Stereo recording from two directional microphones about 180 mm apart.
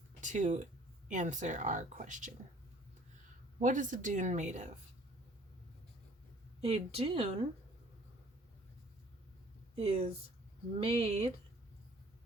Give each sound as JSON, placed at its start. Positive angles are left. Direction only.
{"t": 0.2, "sound": "speech", "side_deg": -45}
{"t": 3.6, "sound": "speech", "side_deg": -45}
{"t": 6.6, "sound": "speech", "side_deg": -35}
{"t": 9.7, "sound": "speech", "side_deg": -35}